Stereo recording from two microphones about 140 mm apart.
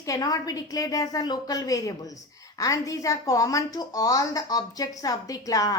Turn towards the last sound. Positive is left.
turn(degrees=25)  # may be behind; listen again after turning